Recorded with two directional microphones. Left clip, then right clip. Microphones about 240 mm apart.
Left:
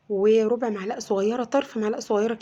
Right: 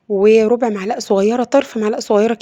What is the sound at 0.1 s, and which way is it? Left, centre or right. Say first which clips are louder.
A woman's voice: right 9 dB; right.